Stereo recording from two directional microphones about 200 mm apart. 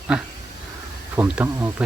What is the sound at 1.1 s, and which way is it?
Speech, 10° right (ahead or behind).